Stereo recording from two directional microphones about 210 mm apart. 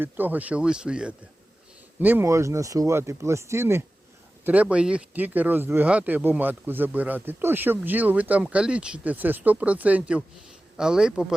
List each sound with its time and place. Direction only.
0.0 s speech: 10° right (ahead or behind)